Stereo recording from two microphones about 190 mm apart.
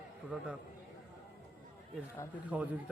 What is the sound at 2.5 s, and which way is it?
Speech, 10° right (ahead or behind).